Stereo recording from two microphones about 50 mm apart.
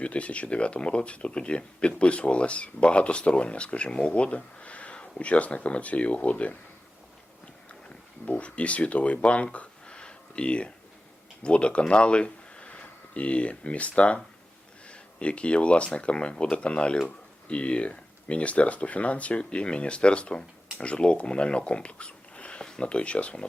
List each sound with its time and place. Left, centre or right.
0.0 s speech: left
8.3 s speech: left